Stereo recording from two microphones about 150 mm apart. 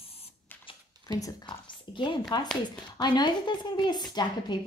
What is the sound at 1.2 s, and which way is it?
Speech, 25° left (ahead or behind).